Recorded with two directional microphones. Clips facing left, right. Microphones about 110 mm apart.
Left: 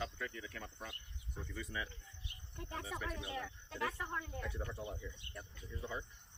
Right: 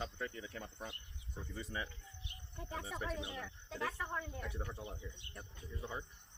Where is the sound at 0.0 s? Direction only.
25° right (ahead or behind).